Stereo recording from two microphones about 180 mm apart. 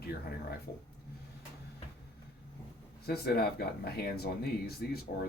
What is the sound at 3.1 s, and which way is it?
Speech, 60° left (ahead or behind).